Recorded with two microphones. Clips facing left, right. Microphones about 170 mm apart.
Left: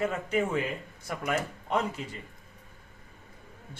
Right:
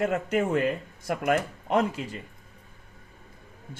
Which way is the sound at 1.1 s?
45° right (ahead or behind).